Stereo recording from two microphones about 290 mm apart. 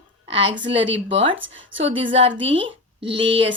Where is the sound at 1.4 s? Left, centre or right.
Right.